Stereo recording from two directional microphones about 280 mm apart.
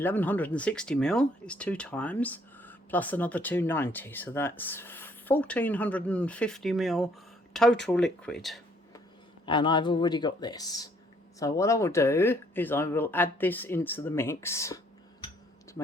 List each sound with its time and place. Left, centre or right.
0.0 s speech: centre
9.5 s speech: centre